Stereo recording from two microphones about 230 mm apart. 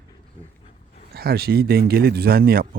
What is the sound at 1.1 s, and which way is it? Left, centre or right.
A man's voice, right.